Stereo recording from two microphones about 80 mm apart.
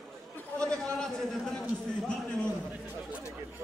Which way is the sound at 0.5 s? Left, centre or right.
Centre.